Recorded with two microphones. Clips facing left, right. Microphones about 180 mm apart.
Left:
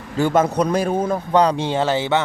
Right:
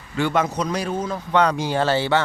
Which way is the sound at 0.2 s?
45° left (ahead or behind).